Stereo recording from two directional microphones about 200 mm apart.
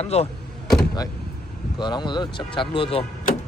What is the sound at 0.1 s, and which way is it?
Speech, 30° left (ahead or behind).